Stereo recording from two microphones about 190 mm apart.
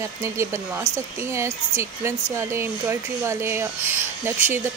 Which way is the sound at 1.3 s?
15° right (ahead or behind).